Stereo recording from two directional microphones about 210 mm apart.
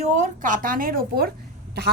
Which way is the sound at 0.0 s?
35° right (ahead or behind).